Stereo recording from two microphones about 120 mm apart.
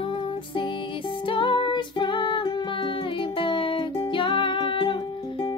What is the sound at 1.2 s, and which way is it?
Music, 45° left (ahead or behind).